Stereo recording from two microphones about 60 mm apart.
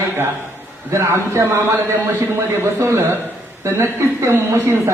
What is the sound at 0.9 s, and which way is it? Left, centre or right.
A man's voice, right.